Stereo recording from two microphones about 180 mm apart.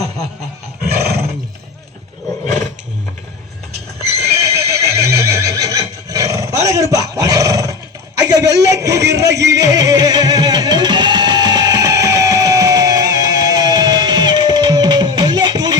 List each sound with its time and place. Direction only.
0.9 s roar: 65° right (ahead or behind)
4.4 s neigh: 15° right (ahead or behind)
6.1 s roar: 20° right (ahead or behind)
8.2 s a sound: 20° right (ahead or behind)
9.5 s music: 20° right (ahead or behind)